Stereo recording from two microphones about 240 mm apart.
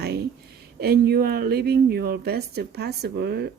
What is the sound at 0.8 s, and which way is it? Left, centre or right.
Speech, right.